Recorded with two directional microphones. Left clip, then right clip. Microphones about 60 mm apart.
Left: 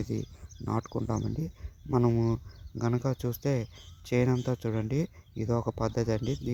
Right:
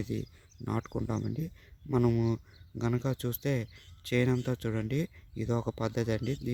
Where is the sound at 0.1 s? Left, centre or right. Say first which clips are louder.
Left 2 dB; right.